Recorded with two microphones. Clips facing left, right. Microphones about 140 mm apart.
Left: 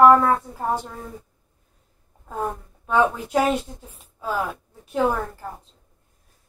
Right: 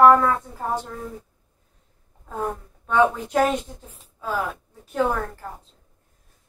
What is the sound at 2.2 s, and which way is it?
A woman's voice, 5° left (ahead or behind).